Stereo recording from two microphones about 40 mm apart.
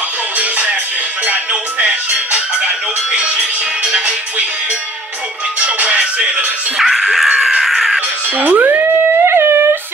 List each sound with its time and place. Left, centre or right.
0.4 s music: right
3.8 s music: right
5.6 s music: right
6.8 s music: centre
7.3 s caw: centre
8.4 s music: right
9.2 s music: right